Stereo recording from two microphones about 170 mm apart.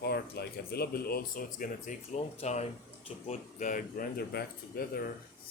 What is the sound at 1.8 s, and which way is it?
Speech, 40° left (ahead or behind).